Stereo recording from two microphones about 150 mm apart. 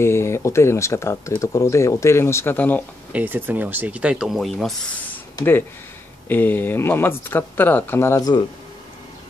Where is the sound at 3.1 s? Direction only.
10° right (ahead or behind).